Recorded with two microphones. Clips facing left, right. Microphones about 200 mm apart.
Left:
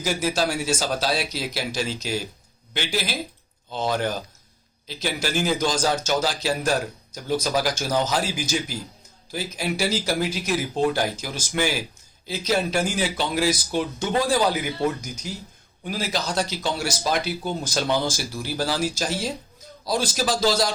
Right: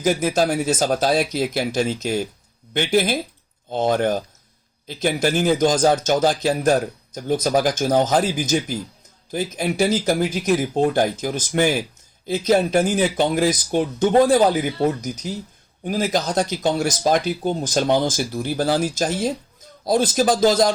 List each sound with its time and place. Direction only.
0.0 s speech: 50° right (ahead or behind)